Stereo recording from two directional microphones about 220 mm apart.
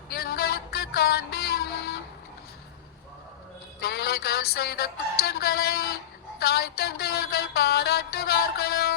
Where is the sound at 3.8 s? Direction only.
45° left (ahead or behind).